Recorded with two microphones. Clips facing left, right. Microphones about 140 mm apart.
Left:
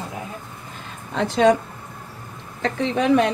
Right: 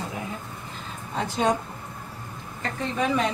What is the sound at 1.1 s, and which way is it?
Speech, 90° left.